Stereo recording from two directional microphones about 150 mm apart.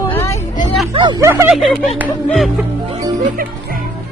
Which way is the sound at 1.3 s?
15° right (ahead or behind).